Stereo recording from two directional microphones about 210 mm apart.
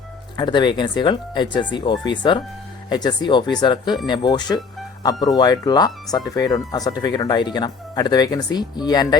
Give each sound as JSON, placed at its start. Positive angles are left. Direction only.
{"t": 0.3, "sound": "speech", "side_deg": 20}